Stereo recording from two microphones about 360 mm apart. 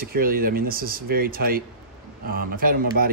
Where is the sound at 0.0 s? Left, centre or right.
Right.